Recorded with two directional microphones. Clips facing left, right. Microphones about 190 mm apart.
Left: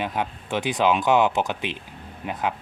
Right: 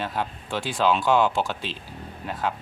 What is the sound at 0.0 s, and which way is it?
Speech, 20° left (ahead or behind).